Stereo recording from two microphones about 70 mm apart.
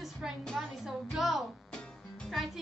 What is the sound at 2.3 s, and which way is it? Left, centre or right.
Speech, centre.